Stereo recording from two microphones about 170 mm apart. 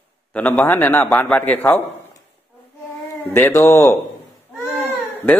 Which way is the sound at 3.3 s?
15° left (ahead or behind).